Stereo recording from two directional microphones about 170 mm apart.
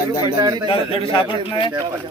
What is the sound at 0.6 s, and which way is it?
A man's voice, 30° left (ahead or behind).